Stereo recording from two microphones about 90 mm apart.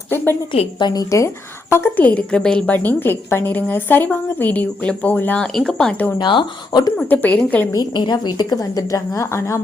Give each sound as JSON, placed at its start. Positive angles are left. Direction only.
{"t": 0.9, "sound": "a woman's voice", "side_deg": 45}
{"t": 1.7, "sound": "a woman's voice", "side_deg": 25}
{"t": 2.7, "sound": "a woman's voice", "side_deg": 20}
{"t": 5.4, "sound": "a woman's voice", "side_deg": 10}
{"t": 6.1, "sound": "a woman's voice", "side_deg": 55}
{"t": 6.9, "sound": "a woman's voice", "side_deg": 20}
{"t": 7.7, "sound": "a woman's voice", "side_deg": 50}